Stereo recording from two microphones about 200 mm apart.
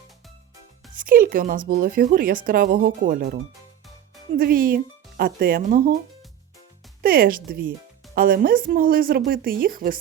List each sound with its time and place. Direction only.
0.9 s speech: 45° right (ahead or behind)
4.4 s speech: 45° right (ahead or behind)
7.0 s speech: 45° right (ahead or behind)